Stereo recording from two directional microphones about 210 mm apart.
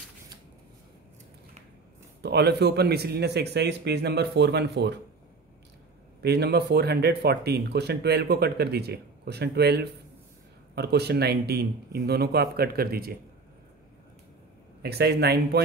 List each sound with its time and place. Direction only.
2.2 s speech: 50° right (ahead or behind)
6.2 s speech: 50° right (ahead or behind)
14.8 s speech: 50° right (ahead or behind)